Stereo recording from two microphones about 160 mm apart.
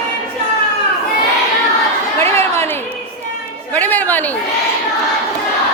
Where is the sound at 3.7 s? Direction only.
10° left (ahead or behind).